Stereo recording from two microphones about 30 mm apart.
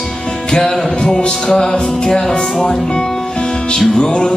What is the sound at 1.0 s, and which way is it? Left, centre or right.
Music, left.